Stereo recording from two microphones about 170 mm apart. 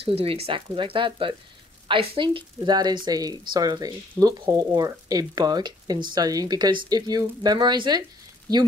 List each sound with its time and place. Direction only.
0.0 s speech: 35° right (ahead or behind)